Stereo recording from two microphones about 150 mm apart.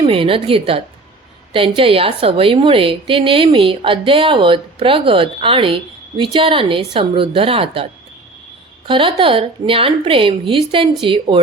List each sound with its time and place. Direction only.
0.0 s a woman's voice: 35° right (ahead or behind)
8.9 s a woman's voice: 35° right (ahead or behind)